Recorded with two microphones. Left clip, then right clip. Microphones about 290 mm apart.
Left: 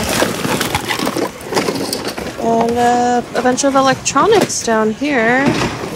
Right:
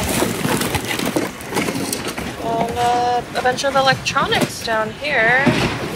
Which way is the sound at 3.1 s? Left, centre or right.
Left.